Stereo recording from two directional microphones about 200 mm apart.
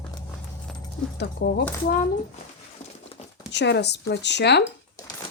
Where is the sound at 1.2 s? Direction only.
55° left (ahead or behind).